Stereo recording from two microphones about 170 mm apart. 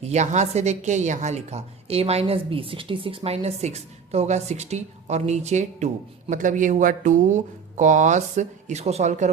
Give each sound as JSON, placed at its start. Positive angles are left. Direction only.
{"t": 0.0, "sound": "a woman's voice", "side_deg": -40}